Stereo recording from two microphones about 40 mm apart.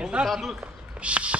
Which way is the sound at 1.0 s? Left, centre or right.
Right.